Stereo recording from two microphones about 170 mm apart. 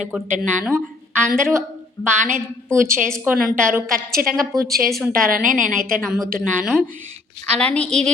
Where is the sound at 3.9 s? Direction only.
60° right (ahead or behind).